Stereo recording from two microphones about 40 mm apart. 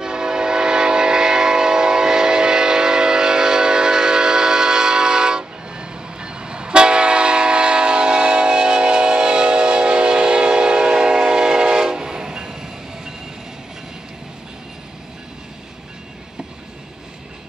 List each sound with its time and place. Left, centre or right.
0.0 s train: centre